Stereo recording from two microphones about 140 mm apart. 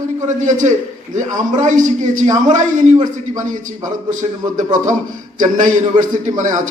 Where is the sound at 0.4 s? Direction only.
65° right (ahead or behind).